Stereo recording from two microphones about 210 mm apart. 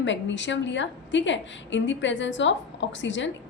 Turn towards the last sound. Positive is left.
turn(degrees=60)  # may be behind; listen again after turning